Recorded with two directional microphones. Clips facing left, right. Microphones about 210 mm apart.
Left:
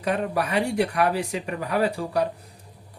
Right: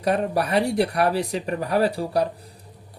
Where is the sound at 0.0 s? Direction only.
40° right (ahead or behind).